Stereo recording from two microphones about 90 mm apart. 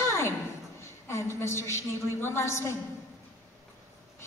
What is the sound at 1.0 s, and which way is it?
Music, 30° left (ahead or behind).